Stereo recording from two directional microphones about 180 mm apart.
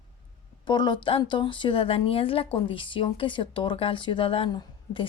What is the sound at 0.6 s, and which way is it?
Speech, 25° left (ahead or behind).